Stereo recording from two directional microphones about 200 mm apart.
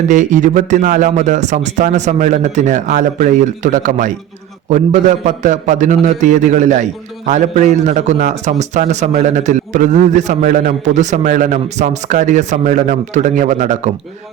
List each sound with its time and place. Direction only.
0.1 s a man's voice: 40° right (ahead or behind)